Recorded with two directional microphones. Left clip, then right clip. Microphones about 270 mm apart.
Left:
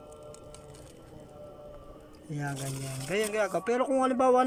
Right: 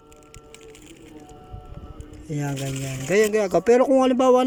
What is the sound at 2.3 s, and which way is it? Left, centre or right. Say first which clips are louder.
Speech: right 7 dB; centre.